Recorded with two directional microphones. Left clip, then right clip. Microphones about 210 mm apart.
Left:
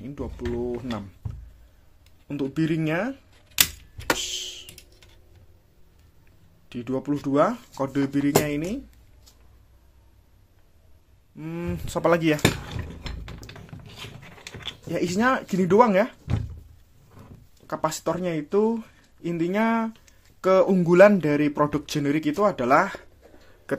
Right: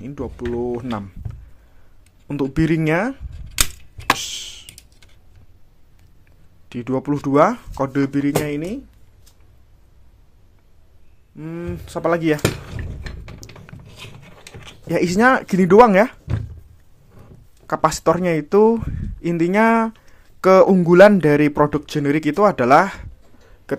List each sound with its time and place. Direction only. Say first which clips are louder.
0.0 s speech: right 5 dB; 15° right (ahead or behind)
2.2 s speech: right 6 dB; 25° right (ahead or behind)
4.2 s computer keyboard: right 2 dB; 20° right (ahead or behind)
6.7 s speech: right 5 dB; 20° right (ahead or behind)
11.3 s speech: right 3 dB; 10° right (ahead or behind)
13.4 s a sound: right 3 dB; 25° right (ahead or behind)
14.9 s speech: right 8 dB; 20° right (ahead or behind)
17.6 s speech: right 9 dB; 25° right (ahead or behind)